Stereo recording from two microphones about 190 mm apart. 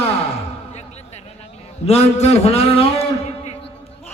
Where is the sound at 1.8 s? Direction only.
35° left (ahead or behind).